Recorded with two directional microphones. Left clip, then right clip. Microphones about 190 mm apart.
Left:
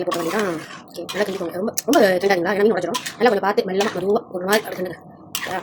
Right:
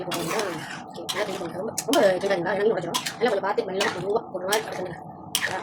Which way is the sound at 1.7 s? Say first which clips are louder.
Left 4 dB; 50° left (ahead or behind).